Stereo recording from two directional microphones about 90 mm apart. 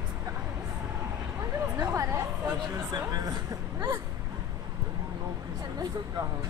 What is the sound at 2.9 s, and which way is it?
Speech, 45° right (ahead or behind).